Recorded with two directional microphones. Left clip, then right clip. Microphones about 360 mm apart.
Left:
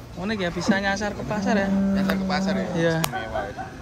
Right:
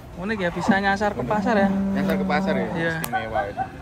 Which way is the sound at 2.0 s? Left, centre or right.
Centre.